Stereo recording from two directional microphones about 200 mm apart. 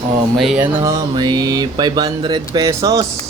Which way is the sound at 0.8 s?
20° right (ahead or behind).